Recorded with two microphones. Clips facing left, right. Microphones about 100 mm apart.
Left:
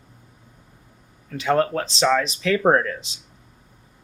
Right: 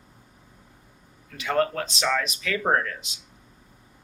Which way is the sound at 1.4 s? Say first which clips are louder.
Left 4 dB; 30° left (ahead or behind).